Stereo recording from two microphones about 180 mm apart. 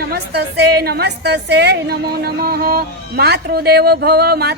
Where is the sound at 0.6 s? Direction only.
60° right (ahead or behind).